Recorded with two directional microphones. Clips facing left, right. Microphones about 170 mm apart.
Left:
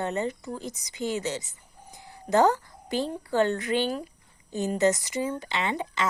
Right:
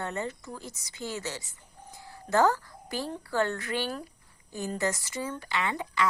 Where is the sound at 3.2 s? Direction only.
20° left (ahead or behind).